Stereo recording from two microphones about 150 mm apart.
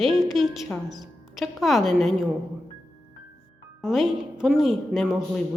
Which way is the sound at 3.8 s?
5° right (ahead or behind).